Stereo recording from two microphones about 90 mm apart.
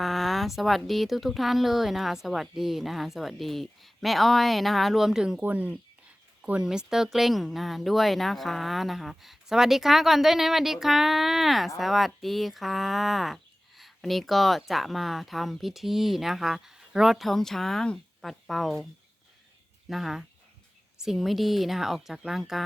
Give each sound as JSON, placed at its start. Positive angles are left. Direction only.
{"t": 0.0, "sound": "a sound", "side_deg": 0}
{"t": 0.9, "sound": "speech", "side_deg": 0}
{"t": 5.4, "sound": "speech", "side_deg": -15}
{"t": 19.9, "sound": "speech", "side_deg": 0}